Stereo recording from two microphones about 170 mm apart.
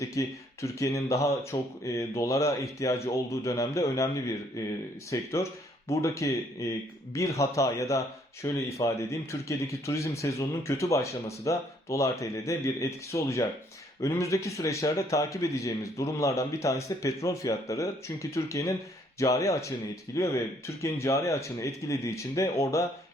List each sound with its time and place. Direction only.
0.0 s a man's voice: 20° left (ahead or behind)